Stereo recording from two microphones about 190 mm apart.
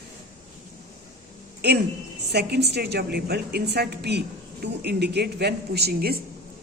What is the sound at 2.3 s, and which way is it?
A woman's voice, 60° right (ahead or behind).